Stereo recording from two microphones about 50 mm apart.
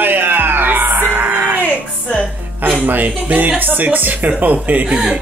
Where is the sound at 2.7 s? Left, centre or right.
Right.